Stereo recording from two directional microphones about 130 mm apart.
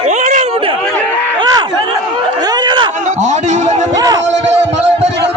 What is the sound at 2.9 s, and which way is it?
Music, 70° right (ahead or behind).